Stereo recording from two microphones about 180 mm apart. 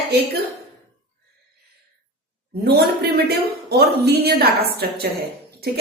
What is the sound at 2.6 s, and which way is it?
A woman's voice, 65° right (ahead or behind).